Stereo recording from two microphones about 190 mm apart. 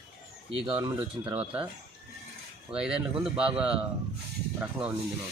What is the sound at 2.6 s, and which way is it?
A man's voice, 5° right (ahead or behind).